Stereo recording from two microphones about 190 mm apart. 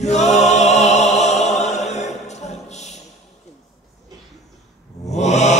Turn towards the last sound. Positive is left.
turn(degrees=35)  # may be behind; listen again after turning